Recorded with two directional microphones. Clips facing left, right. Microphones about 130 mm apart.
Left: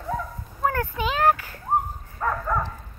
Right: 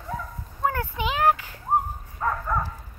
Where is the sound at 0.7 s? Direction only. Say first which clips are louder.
Left 1 dB; 15° right (ahead or behind).